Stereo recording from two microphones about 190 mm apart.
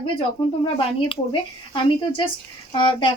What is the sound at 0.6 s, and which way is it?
A woman's voice, 30° left (ahead or behind).